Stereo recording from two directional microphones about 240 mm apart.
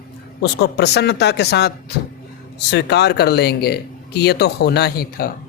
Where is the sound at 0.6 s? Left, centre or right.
Left.